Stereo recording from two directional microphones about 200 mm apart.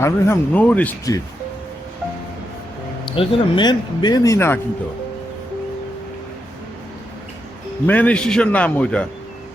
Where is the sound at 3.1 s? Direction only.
25° left (ahead or behind).